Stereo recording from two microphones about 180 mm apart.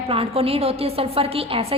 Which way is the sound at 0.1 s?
30° right (ahead or behind).